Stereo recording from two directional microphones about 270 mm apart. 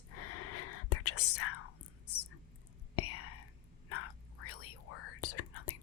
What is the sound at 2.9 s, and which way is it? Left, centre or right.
Whispering, left.